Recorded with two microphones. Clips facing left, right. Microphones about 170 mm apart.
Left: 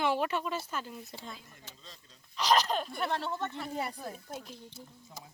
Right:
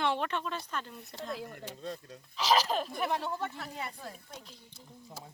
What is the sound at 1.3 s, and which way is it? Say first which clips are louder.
Speech: right 11 dB; 70° right (ahead or behind).